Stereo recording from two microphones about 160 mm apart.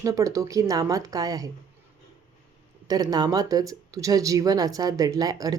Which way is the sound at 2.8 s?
25° right (ahead or behind).